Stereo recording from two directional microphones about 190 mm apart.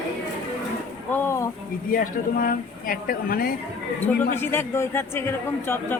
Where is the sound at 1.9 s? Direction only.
50° left (ahead or behind).